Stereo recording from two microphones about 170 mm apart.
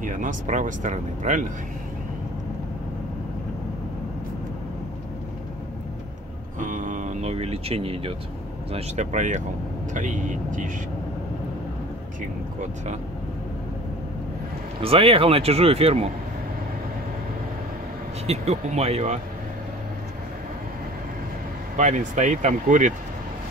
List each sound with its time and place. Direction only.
0.0 s speech: 50° right (ahead or behind)
6.6 s speech: 45° right (ahead or behind)
8.7 s speech: 45° right (ahead or behind)
12.2 s speech: 50° right (ahead or behind)
14.8 s speech: 35° right (ahead or behind)
18.2 s speech: 40° right (ahead or behind)
21.7 s speech: 45° right (ahead or behind)